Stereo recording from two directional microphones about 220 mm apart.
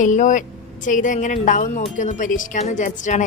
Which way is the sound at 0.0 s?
35° left (ahead or behind).